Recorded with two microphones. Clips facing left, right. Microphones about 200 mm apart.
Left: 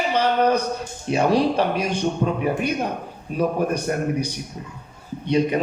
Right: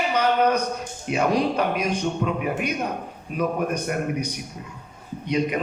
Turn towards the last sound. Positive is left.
turn(degrees=30)  # may be behind; listen again after turning